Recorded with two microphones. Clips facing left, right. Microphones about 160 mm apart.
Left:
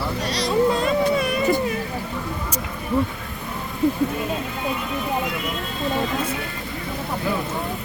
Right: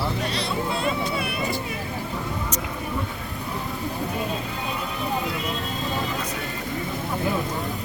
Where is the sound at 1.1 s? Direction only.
50° left (ahead or behind).